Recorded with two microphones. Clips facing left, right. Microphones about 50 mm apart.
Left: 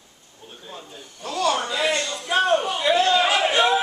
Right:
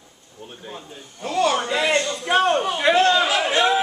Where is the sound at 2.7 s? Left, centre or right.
Right.